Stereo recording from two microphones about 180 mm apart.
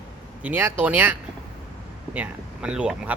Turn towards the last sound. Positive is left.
turn(degrees=-5)  # may be behind; listen again after turning